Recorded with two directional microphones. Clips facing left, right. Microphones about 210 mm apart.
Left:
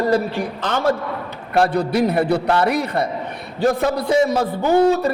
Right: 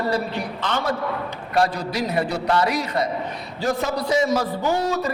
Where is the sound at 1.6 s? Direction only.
60° left (ahead or behind).